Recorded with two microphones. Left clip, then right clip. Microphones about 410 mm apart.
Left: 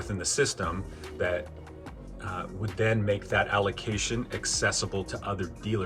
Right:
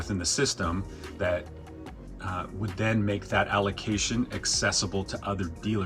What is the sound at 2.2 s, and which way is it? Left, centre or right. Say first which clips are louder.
Speech: right 2 dB; left.